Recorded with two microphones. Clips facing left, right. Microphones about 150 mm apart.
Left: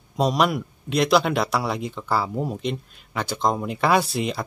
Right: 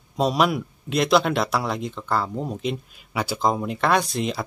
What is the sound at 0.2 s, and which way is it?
Speech, centre (ahead or behind).